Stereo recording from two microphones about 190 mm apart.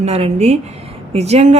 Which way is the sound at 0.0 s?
35° right (ahead or behind).